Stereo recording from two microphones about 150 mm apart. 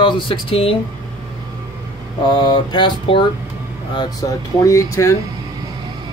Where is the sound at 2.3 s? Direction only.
30° left (ahead or behind).